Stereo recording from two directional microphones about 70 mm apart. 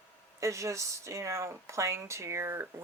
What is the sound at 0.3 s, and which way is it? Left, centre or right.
Speech, right.